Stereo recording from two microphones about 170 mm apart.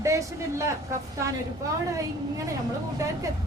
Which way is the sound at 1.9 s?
20° right (ahead or behind).